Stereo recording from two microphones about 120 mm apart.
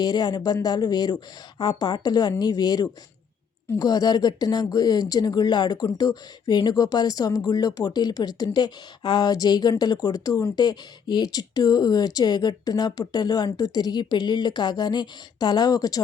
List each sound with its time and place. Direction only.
0.0 s speech: 35° left (ahead or behind)